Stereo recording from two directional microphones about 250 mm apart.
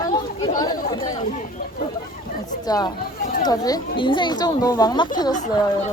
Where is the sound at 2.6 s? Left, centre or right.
Centre.